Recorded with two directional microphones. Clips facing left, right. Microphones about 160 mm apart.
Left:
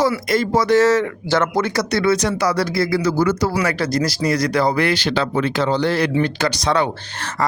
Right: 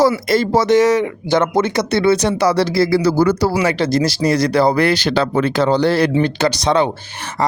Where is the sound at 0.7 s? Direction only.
15° right (ahead or behind).